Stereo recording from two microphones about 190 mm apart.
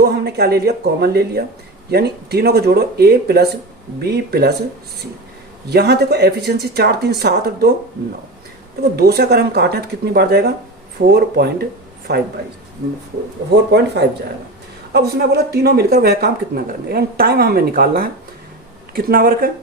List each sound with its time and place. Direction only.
0.0 s speech: 55° right (ahead or behind)
5.7 s speech: 55° right (ahead or behind)
8.8 s speech: 55° right (ahead or behind)
14.9 s speech: 60° right (ahead or behind)